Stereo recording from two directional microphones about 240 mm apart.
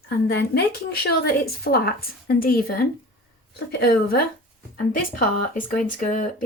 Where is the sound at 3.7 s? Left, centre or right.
Left.